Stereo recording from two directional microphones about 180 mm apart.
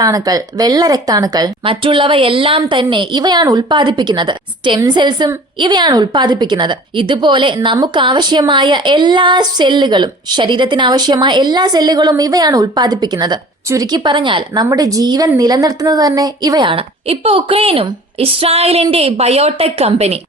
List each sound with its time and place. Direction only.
0.0 s a woman's voice: 20° right (ahead or behind); by 20.1 s 35° right (ahead or behind)